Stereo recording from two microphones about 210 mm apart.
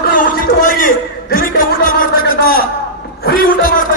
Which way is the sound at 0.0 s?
40° left (ahead or behind).